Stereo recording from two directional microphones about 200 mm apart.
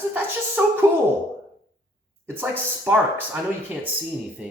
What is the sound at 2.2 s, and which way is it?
Speech, 10° right (ahead or behind).